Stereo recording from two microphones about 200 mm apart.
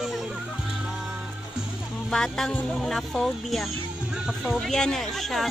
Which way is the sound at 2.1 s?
5° left (ahead or behind).